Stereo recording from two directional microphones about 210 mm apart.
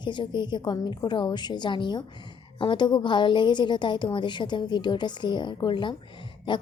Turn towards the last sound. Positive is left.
turn(degrees=20)  # may be behind; listen again after turning